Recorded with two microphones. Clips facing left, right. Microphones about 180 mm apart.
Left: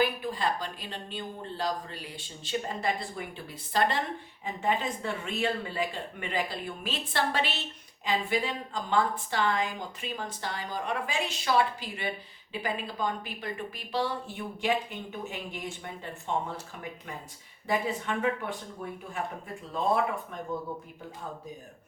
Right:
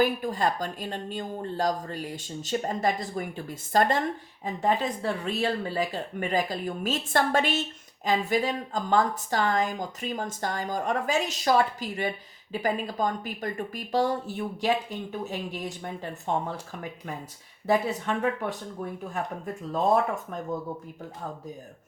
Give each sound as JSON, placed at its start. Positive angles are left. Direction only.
{"t": 0.0, "sound": "a woman's voice", "side_deg": -45}
{"t": 17.7, "sound": "speech", "side_deg": -40}